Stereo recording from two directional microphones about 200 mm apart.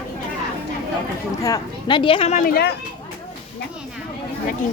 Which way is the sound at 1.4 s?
20° left (ahead or behind).